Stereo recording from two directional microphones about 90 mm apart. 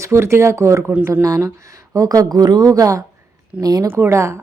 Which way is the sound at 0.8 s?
20° right (ahead or behind).